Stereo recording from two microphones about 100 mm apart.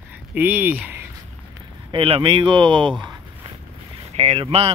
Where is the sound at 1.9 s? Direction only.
65° right (ahead or behind).